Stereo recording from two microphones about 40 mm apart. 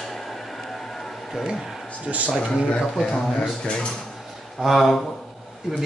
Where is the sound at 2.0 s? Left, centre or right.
Right.